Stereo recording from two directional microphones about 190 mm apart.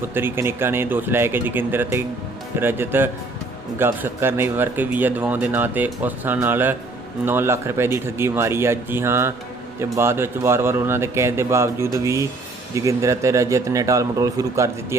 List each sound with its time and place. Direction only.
0.1 s a man's voice: 10° right (ahead or behind)